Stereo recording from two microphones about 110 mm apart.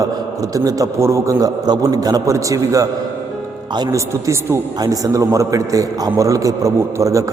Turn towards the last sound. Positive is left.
turn(degrees=-30)  # may be behind; listen again after turning